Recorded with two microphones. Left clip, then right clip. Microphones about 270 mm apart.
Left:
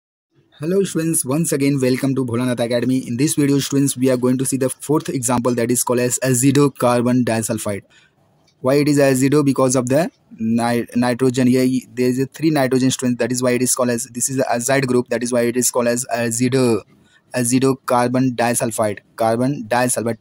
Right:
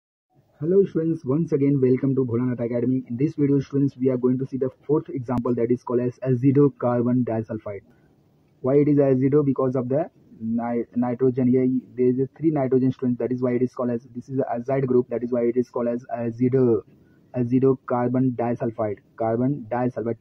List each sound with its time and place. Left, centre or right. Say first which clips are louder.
0.6 s speech: left 1 dB; left
16.5 s speech: left 2 dB; left
17.3 s speech: left 3 dB; left